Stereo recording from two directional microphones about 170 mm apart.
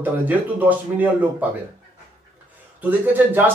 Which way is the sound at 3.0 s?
10° right (ahead or behind).